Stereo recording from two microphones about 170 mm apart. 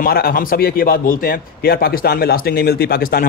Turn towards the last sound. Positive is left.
turn(degrees=60)  # may be behind; listen again after turning